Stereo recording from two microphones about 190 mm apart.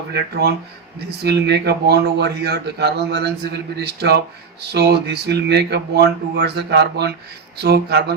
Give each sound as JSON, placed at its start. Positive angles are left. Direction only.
{"t": 0.1, "sound": "speech", "side_deg": -60}